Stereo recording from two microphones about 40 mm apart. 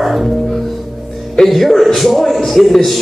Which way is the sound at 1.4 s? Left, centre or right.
Centre.